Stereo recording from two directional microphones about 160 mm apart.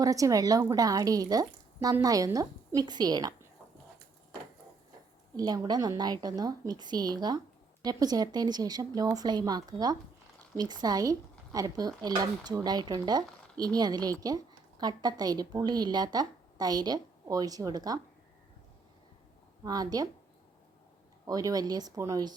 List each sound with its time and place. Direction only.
0.0 s speech: 20° right (ahead or behind)
5.4 s speech: 25° right (ahead or behind)
19.6 s speech: 25° right (ahead or behind)
21.2 s speech: 25° right (ahead or behind)